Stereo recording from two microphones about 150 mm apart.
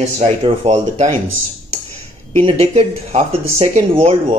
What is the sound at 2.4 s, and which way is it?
Speech, 40° right (ahead or behind).